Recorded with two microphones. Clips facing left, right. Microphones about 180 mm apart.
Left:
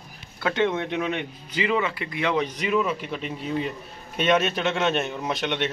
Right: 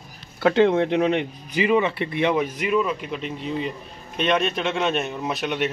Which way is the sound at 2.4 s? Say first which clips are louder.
Right 2 dB; centre (ahead or behind).